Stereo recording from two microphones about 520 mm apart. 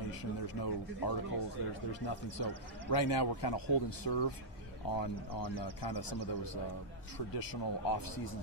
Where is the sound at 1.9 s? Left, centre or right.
Left.